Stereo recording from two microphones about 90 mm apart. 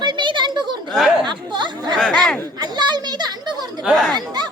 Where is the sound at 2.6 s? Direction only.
50° right (ahead or behind).